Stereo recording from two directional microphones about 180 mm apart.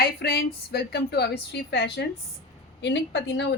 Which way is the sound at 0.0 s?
60° left (ahead or behind).